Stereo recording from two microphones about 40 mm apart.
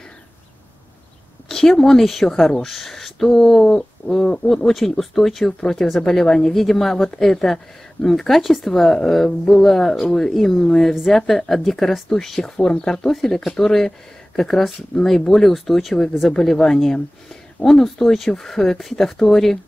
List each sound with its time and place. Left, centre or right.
1.5 s speech: centre
3.7 s bird: centre
4.5 s speech: centre